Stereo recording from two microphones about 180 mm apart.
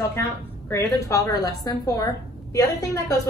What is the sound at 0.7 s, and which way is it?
A woman's voice, 20° left (ahead or behind).